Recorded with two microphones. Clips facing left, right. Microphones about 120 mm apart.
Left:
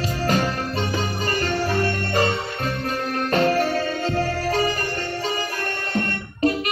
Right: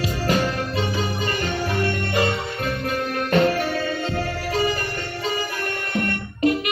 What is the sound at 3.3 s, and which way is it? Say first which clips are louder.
Music: even; 35° left (ahead or behind).